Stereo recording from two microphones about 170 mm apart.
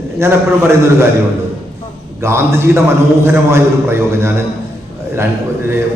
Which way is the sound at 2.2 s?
15° right (ahead or behind).